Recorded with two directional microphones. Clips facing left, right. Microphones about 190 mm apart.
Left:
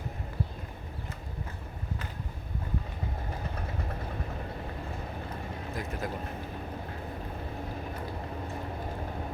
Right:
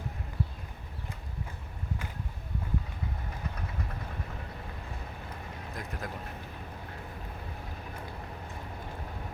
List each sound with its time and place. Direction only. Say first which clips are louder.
5.7 s speech: left 4 dB; centre (ahead or behind)